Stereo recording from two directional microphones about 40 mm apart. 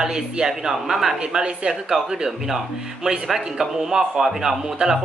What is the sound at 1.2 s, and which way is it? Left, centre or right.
Speech, right.